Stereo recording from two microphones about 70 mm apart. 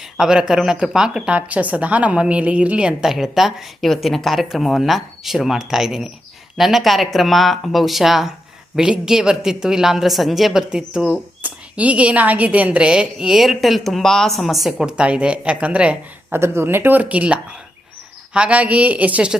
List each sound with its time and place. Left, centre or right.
0.2 s a woman's voice: centre
3.0 s a woman's voice: centre
16.3 s speech: right